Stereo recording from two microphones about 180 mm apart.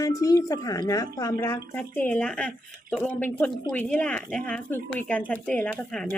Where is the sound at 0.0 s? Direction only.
20° left (ahead or behind).